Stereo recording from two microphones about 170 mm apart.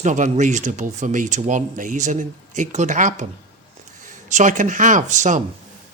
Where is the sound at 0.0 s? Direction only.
45° right (ahead or behind).